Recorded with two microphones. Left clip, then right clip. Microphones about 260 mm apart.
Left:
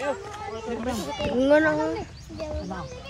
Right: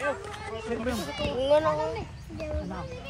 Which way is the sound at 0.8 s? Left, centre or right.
Left.